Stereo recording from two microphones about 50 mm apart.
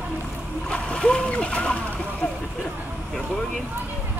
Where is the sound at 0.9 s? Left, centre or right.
Left.